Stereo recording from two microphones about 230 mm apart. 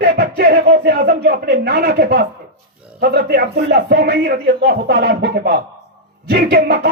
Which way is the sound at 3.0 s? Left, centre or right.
Right.